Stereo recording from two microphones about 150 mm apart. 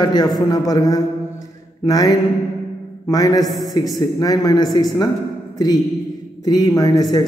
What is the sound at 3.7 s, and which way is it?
A man's voice, 25° left (ahead or behind).